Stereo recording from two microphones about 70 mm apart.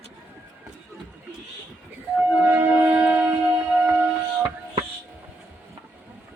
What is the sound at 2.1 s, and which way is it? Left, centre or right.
Train, right.